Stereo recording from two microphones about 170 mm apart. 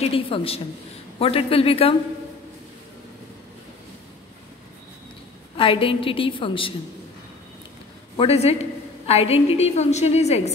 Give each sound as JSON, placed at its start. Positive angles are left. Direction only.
{"t": 0.0, "sound": "a woman's voice", "side_deg": 35}
{"t": 5.6, "sound": "a woman's voice", "side_deg": 30}
{"t": 8.2, "sound": "a woman's voice", "side_deg": 35}